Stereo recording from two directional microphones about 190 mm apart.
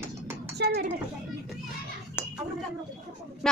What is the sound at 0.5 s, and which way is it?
Speech, 55° right (ahead or behind).